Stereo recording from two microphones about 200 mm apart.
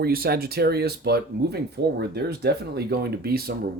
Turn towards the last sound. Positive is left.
turn(degrees=-50)  # may be behind; listen again after turning